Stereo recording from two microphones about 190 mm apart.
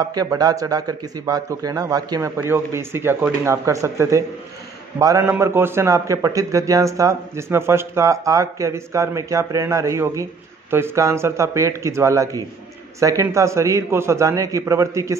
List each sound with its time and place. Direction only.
0.0 s a man's voice: 20° right (ahead or behind)